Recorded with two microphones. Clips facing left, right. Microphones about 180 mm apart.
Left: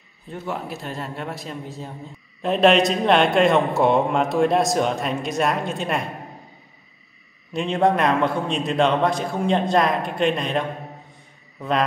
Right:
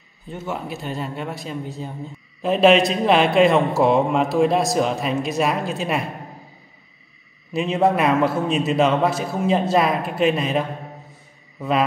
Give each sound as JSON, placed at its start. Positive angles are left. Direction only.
{"t": 0.3, "sound": "a man's voice", "side_deg": 0}
{"t": 7.5, "sound": "a man's voice", "side_deg": -5}